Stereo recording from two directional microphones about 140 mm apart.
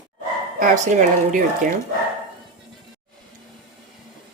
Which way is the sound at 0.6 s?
75° right (ahead or behind).